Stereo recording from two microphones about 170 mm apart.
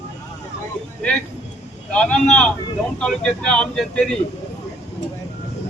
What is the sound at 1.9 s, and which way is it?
Speech, 5° left (ahead or behind).